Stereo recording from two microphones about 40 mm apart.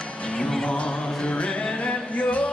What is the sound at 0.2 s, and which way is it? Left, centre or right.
Music, left.